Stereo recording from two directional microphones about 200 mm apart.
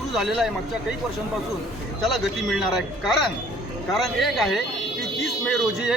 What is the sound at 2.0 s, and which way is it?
Speech, centre (ahead or behind).